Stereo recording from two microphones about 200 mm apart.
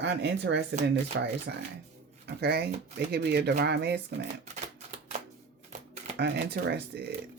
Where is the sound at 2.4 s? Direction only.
55° right (ahead or behind).